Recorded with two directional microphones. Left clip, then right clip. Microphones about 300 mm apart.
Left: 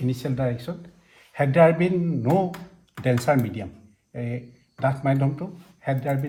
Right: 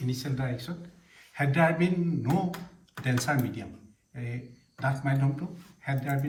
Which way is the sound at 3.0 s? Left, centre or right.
Left.